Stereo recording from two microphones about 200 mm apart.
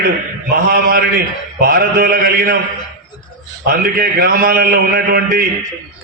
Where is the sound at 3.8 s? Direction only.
45° right (ahead or behind).